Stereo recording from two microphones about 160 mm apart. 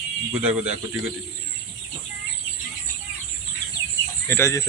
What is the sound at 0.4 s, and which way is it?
Speech, 10° right (ahead or behind).